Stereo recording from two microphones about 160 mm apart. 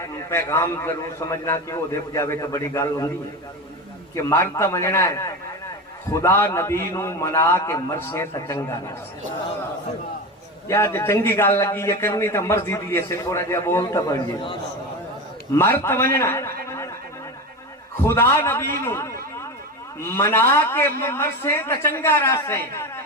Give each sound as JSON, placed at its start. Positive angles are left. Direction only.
{"t": 0.0, "sound": "a man's voice", "side_deg": 15}
{"t": 4.1, "sound": "a man's voice", "side_deg": 15}
{"t": 10.7, "sound": "a man's voice", "side_deg": 15}
{"t": 15.8, "sound": "a man's voice", "side_deg": 15}
{"t": 16.6, "sound": "a sound", "side_deg": 15}
{"t": 18.0, "sound": "a man's voice", "side_deg": 15}